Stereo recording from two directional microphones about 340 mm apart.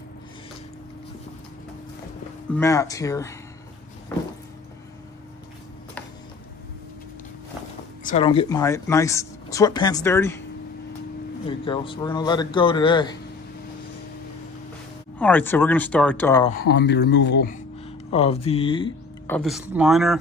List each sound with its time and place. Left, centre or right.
2.5 s speech: centre
8.0 s speech: centre
11.4 s speech: centre
15.1 s speech: centre
16.5 s speech: left
17.8 s speech: centre